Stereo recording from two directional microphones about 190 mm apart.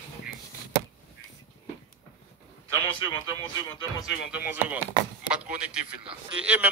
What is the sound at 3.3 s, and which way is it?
Speech, 20° left (ahead or behind).